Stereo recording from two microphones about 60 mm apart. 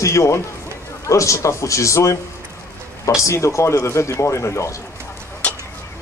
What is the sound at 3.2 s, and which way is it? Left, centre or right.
Speech, left.